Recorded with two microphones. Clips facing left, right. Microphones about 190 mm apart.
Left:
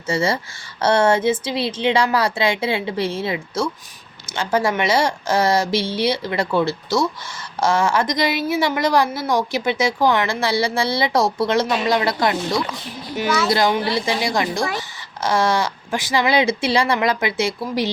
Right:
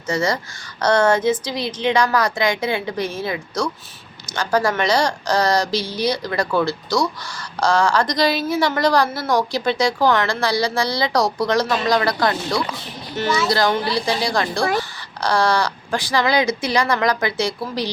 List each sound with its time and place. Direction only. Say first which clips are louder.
0.1 s a woman's voice: even; 25° left (ahead or behind)
13.1 s speech: even; 5° left (ahead or behind)
13.5 s a woman's voice: left 1 dB; 20° left (ahead or behind)